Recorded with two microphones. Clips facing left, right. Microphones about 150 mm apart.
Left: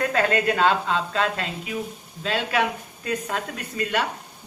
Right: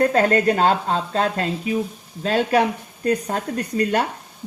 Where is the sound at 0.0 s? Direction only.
40° right (ahead or behind).